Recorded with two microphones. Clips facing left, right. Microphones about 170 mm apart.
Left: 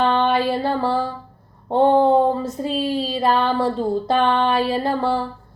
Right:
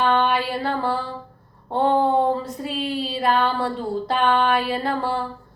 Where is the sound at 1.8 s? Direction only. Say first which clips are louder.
Left 4 dB; 25° left (ahead or behind).